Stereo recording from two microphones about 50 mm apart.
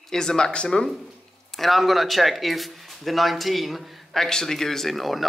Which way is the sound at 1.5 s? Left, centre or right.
Centre.